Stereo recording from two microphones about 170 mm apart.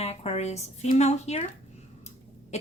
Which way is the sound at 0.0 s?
40° left (ahead or behind).